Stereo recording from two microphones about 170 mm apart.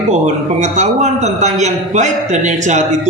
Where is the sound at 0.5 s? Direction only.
45° right (ahead or behind).